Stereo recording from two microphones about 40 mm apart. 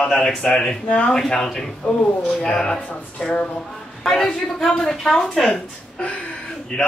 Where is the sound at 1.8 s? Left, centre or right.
Left.